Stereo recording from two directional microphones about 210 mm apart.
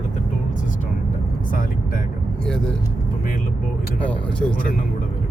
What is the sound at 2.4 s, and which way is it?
Vehicle, 5° left (ahead or behind).